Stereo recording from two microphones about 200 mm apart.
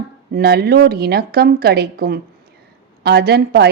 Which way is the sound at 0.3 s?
50° right (ahead or behind).